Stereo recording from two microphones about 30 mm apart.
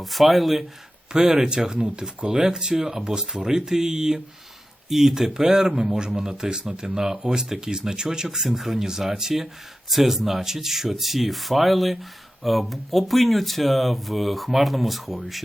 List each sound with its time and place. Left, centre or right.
0.0 s speech: centre
1.1 s speech: centre
8.4 s speech: centre